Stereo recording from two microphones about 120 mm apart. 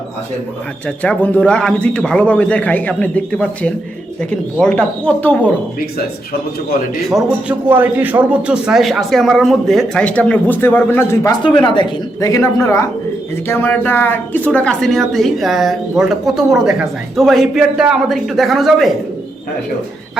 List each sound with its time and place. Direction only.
0.9 s a man's voice: 10° left (ahead or behind)
7.1 s speech: centre (ahead or behind)
7.7 s speech: 15° right (ahead or behind); by 11.3 s 20° left (ahead or behind)
11.3 s speech: 40° left (ahead or behind)
12.2 s speech: 25° left (ahead or behind); by 18.9 s centre (ahead or behind)